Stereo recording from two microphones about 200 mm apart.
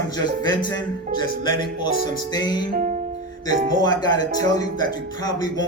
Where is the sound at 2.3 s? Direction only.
20° left (ahead or behind).